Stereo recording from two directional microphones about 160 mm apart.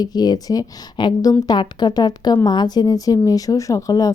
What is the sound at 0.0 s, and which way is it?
A woman's voice, 25° left (ahead or behind).